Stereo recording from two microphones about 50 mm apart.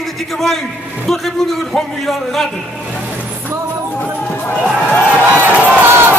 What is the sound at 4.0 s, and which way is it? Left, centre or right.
Music, left.